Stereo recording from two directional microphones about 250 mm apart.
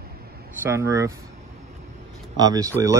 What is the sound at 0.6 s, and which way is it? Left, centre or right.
Speech, centre.